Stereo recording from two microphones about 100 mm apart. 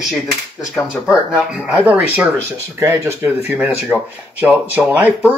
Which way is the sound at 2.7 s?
25° right (ahead or behind).